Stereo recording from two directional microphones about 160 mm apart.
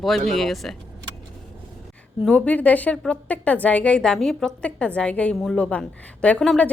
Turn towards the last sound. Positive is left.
turn(degrees=5)  # may be behind; listen again after turning